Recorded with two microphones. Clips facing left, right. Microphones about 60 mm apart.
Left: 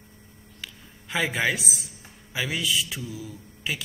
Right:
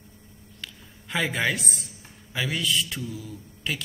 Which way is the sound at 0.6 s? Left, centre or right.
Centre.